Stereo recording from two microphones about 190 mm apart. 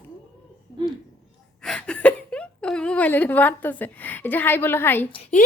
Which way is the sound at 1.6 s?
5° left (ahead or behind).